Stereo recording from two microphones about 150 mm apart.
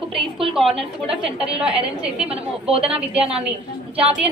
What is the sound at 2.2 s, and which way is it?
Speech, 40° right (ahead or behind).